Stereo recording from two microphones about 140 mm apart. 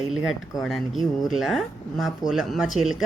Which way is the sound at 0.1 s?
5° right (ahead or behind).